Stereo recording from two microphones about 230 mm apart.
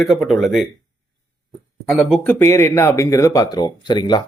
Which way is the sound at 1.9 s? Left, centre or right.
Centre.